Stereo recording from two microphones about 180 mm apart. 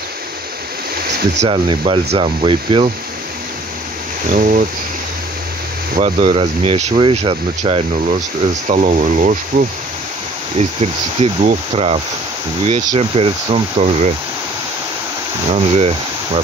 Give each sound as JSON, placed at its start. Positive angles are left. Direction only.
{"t": 1.4, "sound": "speech", "side_deg": -30}
{"t": 4.4, "sound": "speech", "side_deg": -45}
{"t": 5.9, "sound": "speech", "side_deg": -35}
{"t": 10.8, "sound": "speech", "side_deg": -35}
{"t": 15.5, "sound": "speech", "side_deg": -35}